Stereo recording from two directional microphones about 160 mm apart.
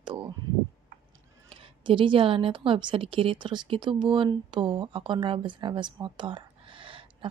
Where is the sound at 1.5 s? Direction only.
35° right (ahead or behind).